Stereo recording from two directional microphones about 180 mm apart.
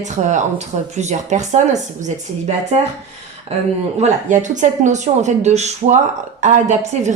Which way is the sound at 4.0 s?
45° right (ahead or behind).